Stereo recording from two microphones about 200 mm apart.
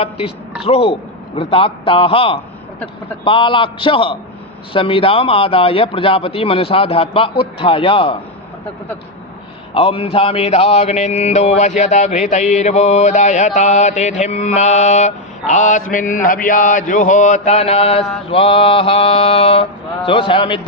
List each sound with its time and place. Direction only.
0.6 s a man's voice: 30° left (ahead or behind)
9.7 s mantra: 30° left (ahead or behind)
18.3 s a man's voice: 25° left (ahead or behind)